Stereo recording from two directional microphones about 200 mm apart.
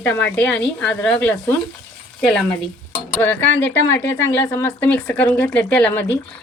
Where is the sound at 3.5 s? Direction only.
65° left (ahead or behind).